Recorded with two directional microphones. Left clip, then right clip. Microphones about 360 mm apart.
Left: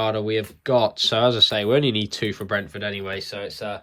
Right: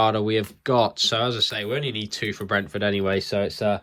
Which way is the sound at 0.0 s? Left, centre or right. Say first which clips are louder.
Right 2 dB; centre.